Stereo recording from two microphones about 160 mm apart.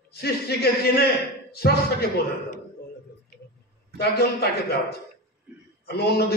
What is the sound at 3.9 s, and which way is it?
A man's voice, 85° left.